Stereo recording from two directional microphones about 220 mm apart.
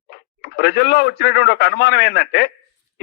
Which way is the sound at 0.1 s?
45° left (ahead or behind).